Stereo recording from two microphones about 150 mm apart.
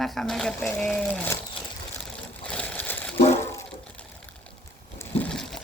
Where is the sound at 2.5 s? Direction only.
10° left (ahead or behind).